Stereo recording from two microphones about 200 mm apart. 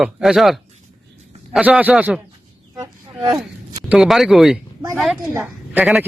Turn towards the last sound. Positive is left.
turn(degrees=-5)  # may be behind; listen again after turning